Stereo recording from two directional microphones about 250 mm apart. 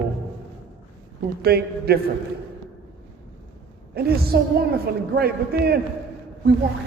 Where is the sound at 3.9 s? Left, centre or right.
Right.